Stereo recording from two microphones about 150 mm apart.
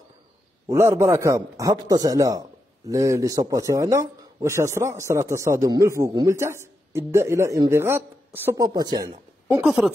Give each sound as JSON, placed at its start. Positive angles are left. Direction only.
{"t": 0.7, "sound": "a man's voice", "side_deg": -15}
{"t": 9.7, "sound": "speech", "side_deg": -5}